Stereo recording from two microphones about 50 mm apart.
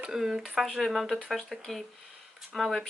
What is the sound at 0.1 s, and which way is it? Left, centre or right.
Speech, centre.